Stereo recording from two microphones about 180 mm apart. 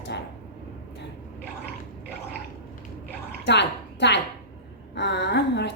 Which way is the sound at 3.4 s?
75° left (ahead or behind).